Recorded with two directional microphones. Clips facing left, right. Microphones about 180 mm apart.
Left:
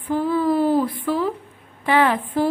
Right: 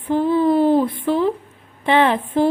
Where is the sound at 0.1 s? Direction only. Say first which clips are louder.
Right 3 dB; 25° right (ahead or behind).